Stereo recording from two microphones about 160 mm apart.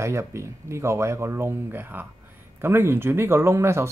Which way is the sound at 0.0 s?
15° right (ahead or behind).